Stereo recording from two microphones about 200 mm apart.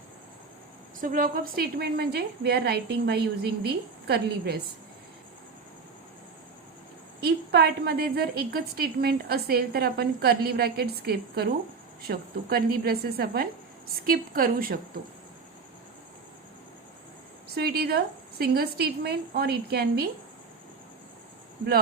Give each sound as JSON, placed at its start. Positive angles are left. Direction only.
{"t": 1.0, "sound": "a woman's voice", "side_deg": -45}
{"t": 7.2, "sound": "a woman's voice", "side_deg": -55}
{"t": 17.5, "sound": "a woman's voice", "side_deg": -50}